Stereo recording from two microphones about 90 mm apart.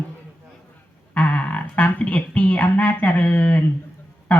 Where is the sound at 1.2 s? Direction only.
15° left (ahead or behind).